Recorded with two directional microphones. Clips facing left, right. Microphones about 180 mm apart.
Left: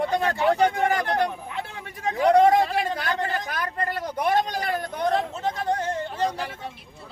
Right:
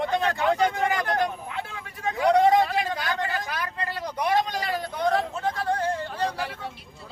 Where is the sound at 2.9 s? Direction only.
45° left (ahead or behind).